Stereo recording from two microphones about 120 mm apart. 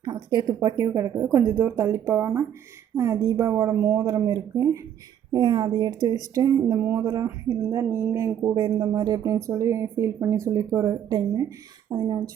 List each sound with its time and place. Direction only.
0.0 s speech: 35° right (ahead or behind)
3.8 s speech: 15° right (ahead or behind)
4.0 s a woman's voice: 30° right (ahead or behind)
8.8 s a woman's voice: 30° right (ahead or behind)